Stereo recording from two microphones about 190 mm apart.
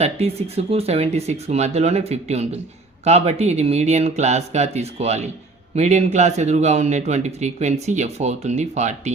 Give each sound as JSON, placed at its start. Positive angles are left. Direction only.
{"t": 0.0, "sound": "speech", "side_deg": -30}